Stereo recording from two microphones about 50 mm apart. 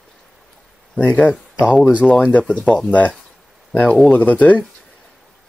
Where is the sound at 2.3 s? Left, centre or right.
Left.